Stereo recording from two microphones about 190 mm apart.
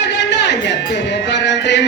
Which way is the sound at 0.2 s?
65° left (ahead or behind).